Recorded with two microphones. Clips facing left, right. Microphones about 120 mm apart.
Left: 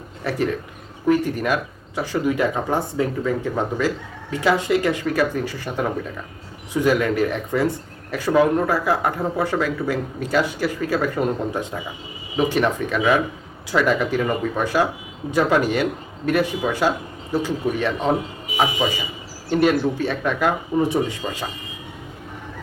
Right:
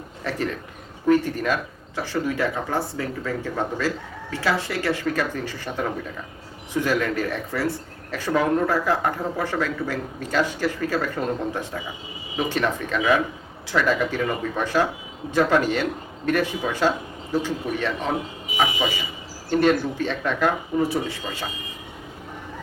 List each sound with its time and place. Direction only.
0.3 s speech: 10° left (ahead or behind)
19.5 s speech: 10° left (ahead or behind)